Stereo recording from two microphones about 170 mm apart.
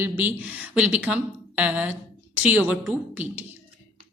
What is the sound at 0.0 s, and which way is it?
Speech, 10° right (ahead or behind).